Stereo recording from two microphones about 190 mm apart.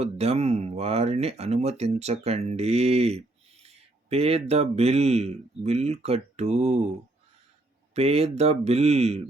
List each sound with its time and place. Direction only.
0.0 s speech: 35° right (ahead or behind)
7.9 s speech: 35° right (ahead or behind)